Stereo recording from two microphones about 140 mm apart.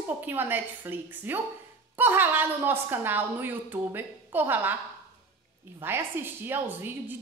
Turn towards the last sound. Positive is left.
turn(degrees=-15)  # may be behind; listen again after turning